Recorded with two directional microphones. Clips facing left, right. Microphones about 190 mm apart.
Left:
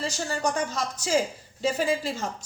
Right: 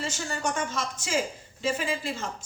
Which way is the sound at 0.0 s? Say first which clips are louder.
Left 3 dB; 35° left (ahead or behind).